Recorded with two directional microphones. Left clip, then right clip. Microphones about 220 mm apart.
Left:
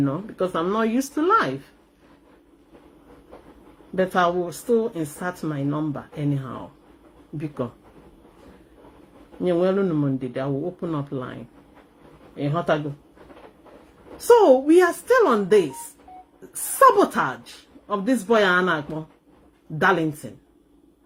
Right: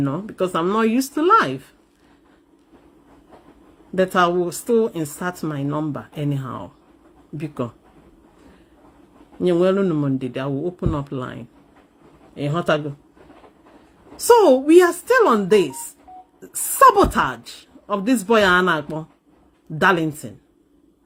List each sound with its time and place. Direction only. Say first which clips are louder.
0.0 s speech: right 2 dB; 45° right (ahead or behind)
3.9 s speech: right 3 dB; 45° right (ahead or behind)
9.4 s speech: right 3 dB; 50° right (ahead or behind)
14.3 s speech: right 2 dB; 45° right (ahead or behind)